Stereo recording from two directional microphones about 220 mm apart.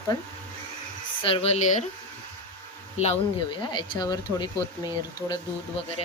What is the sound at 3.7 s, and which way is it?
Speech, 20° left (ahead or behind).